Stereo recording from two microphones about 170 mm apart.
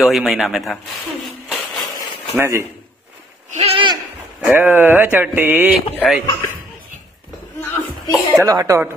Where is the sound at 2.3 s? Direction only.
15° right (ahead or behind).